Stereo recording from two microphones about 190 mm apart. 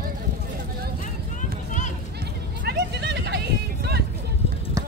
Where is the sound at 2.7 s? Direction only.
60° right (ahead or behind).